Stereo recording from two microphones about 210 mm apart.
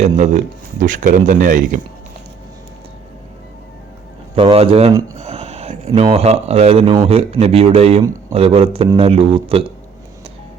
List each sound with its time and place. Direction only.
0.2 s speech: 35° right (ahead or behind)
4.4 s speech: 25° right (ahead or behind)